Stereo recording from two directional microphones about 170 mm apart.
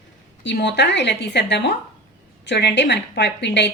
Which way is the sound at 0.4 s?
90° left.